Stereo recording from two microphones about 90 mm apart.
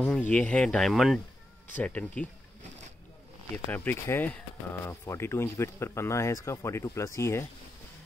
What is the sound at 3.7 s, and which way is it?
Speech, 20° left (ahead or behind).